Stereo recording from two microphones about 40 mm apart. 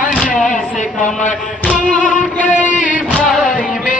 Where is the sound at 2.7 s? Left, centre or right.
Right.